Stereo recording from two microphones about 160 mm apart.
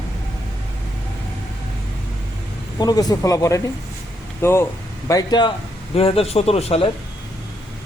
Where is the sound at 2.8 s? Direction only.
25° left (ahead or behind); by 6.9 s 40° left (ahead or behind).